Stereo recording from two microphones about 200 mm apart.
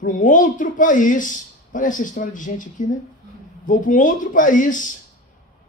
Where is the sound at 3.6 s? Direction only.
40° left (ahead or behind).